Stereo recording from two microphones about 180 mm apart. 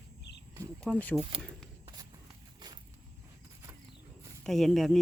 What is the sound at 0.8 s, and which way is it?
Speech, 10° left (ahead or behind).